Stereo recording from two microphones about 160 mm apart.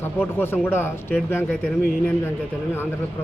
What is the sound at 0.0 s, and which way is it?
Speech, 15° left (ahead or behind).